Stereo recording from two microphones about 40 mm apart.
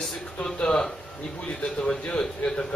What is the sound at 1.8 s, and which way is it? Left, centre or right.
Speech, left.